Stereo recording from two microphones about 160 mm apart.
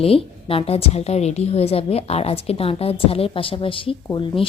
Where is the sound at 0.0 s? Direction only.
35° left (ahead or behind).